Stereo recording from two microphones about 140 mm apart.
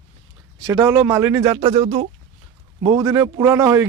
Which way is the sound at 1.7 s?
45° right (ahead or behind).